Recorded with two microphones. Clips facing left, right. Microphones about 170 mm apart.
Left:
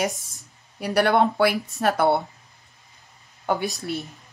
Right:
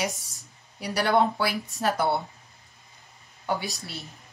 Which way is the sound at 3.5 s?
55° left (ahead or behind).